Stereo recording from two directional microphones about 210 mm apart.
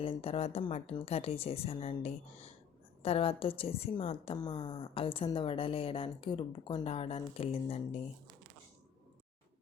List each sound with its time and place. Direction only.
0.0 s a woman's voice: 25° left (ahead or behind)